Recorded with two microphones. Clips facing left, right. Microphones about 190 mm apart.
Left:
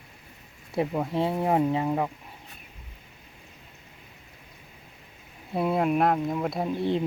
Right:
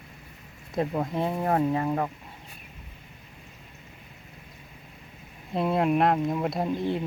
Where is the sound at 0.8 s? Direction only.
10° left (ahead or behind).